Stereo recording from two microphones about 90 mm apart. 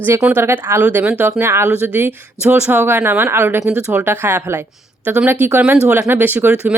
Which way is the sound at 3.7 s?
15° right (ahead or behind).